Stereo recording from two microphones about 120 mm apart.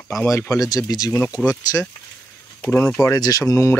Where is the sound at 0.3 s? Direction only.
25° left (ahead or behind).